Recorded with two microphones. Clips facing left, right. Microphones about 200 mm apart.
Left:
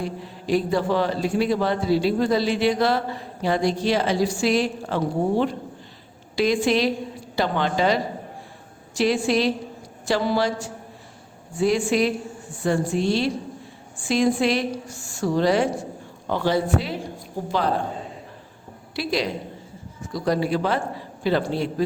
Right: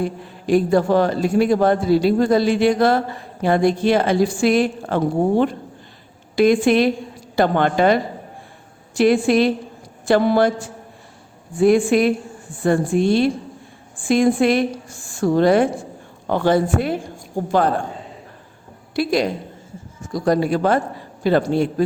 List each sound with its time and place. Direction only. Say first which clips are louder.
0.0 s a man's voice: right 5 dB; 50° right (ahead or behind)
18.9 s a man's voice: right 6 dB; 50° right (ahead or behind)